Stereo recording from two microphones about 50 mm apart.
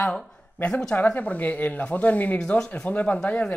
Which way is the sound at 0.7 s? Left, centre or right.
Centre.